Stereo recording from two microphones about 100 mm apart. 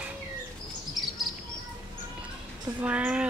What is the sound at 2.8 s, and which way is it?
Speech, 15° right (ahead or behind).